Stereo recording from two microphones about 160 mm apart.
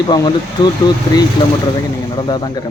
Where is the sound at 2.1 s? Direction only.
30° left (ahead or behind).